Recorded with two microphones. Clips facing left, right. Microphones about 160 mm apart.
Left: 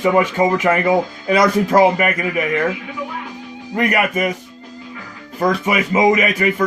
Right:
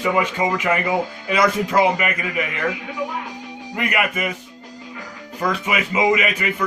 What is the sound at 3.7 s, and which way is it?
Speech, 40° left (ahead or behind).